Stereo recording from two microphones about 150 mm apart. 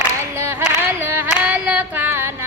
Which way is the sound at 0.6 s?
15° right (ahead or behind).